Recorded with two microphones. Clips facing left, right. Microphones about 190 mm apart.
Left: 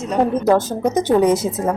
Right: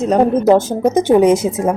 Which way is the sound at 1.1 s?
20° right (ahead or behind).